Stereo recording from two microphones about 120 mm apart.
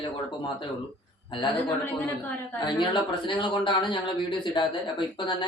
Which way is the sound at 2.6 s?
40° left (ahead or behind).